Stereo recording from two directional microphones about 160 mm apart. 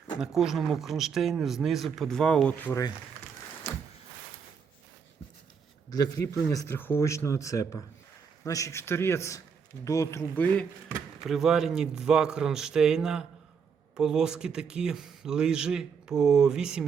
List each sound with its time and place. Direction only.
0.2 s a man's voice: centre (ahead or behind)
5.9 s speech: 20° left (ahead or behind)
11.2 s a man's voice: centre (ahead or behind)